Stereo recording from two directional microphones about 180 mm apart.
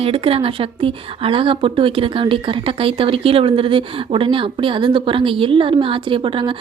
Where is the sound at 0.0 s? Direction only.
30° right (ahead or behind).